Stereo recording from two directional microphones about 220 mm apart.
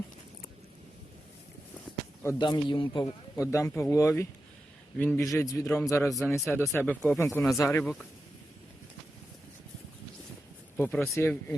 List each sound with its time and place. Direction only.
2.2 s speech: 20° left (ahead or behind)
5.6 s speech: 5° left (ahead or behind)
10.8 s speech: 5° left (ahead or behind)